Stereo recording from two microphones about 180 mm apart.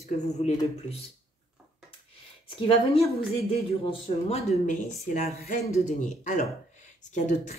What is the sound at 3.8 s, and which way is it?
A woman's voice, 35° left (ahead or behind).